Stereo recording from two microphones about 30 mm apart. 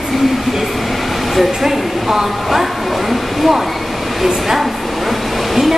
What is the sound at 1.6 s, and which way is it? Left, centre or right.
A woman's voice, centre.